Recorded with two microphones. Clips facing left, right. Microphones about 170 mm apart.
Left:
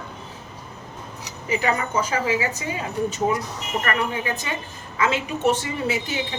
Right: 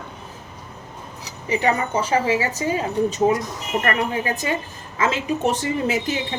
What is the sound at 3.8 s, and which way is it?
Speech, 35° right (ahead or behind).